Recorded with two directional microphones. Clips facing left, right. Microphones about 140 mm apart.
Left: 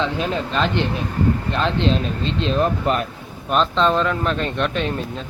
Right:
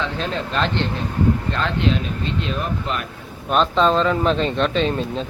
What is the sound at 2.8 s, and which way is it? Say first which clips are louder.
Speech: left 6 dB; 40° left (ahead or behind).